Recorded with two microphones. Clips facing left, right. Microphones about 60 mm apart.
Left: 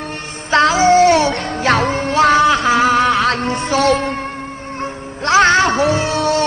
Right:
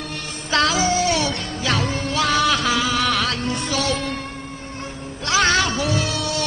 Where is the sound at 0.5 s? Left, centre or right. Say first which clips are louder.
Left 8 dB; left.